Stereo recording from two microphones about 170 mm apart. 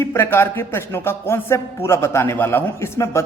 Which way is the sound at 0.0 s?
15° left (ahead or behind).